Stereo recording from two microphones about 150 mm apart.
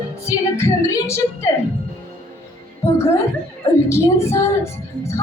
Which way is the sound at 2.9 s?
20° left (ahead or behind).